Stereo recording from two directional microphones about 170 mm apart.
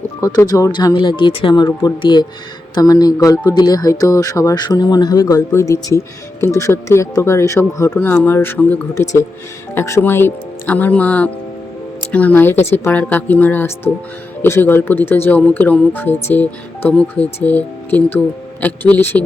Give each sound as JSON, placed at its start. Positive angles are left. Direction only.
{"t": 0.2, "sound": "speech", "side_deg": 20}